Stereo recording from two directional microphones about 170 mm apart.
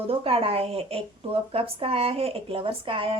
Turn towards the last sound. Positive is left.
turn(degrees=-30)  # may be behind; listen again after turning